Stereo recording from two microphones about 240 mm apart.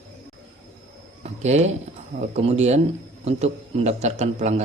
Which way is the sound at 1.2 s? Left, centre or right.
Right.